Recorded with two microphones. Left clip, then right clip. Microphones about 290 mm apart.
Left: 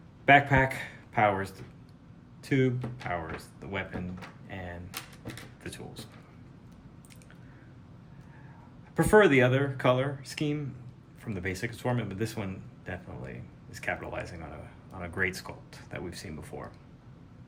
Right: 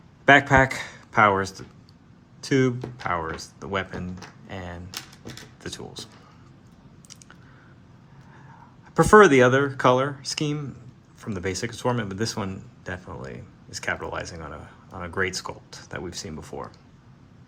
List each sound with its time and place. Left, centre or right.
0.3 s speech: right
9.0 s speech: centre